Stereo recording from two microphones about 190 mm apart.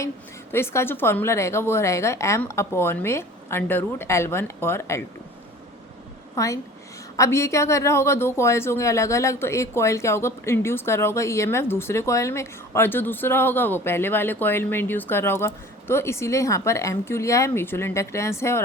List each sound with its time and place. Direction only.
0.5 s speech: 15° left (ahead or behind)
6.3 s a woman's voice: 15° left (ahead or behind)